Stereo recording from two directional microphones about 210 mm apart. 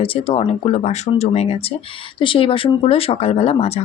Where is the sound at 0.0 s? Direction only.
25° left (ahead or behind).